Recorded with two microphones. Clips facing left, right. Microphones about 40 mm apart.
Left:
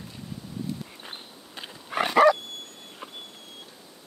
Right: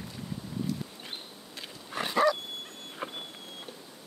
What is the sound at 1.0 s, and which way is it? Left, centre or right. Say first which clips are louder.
Dog: left 1 dB; left.